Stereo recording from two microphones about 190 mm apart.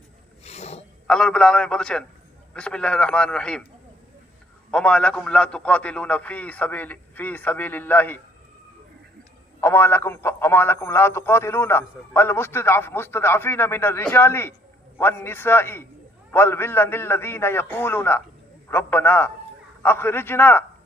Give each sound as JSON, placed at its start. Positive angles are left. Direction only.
{"t": 0.4, "sound": "sniff", "side_deg": 35}
{"t": 1.0, "sound": "a man's voice", "side_deg": 5}
{"t": 4.7, "sound": "speech", "side_deg": 5}
{"t": 9.6, "sound": "speech", "side_deg": 10}